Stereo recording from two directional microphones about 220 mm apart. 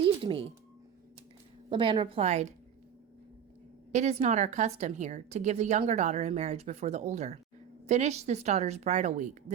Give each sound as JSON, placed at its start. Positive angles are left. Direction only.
{"t": 0.0, "sound": "a sound", "side_deg": -25}
{"t": 1.7, "sound": "a woman's voice", "side_deg": -20}
{"t": 3.9, "sound": "speech", "side_deg": -30}